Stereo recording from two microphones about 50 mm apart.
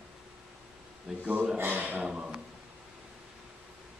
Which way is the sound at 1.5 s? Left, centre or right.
Right.